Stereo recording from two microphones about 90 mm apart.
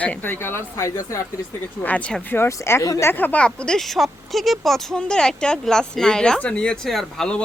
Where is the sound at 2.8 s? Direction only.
40° left (ahead or behind).